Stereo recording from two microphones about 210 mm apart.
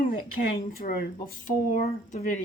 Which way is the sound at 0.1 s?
40° left (ahead or behind).